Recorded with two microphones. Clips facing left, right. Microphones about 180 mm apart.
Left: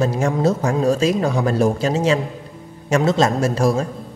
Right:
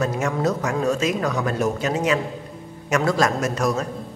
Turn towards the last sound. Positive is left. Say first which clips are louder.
# left 4 dB
turn(degrees=30)  # may be behind; listen again after turning